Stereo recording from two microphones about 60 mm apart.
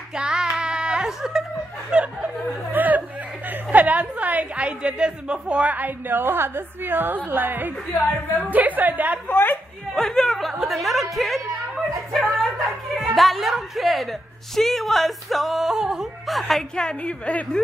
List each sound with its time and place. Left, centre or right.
0.1 s child singing: centre
1.9 s speech: centre
2.7 s a woman's voice: right
9.3 s a woman's voice: left
9.9 s a woman's voice: centre
16.7 s a woman's voice: centre